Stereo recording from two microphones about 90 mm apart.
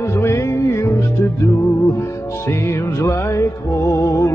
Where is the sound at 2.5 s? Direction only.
30° left (ahead or behind).